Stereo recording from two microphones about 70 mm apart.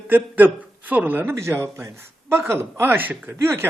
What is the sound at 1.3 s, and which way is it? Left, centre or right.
Speech, right.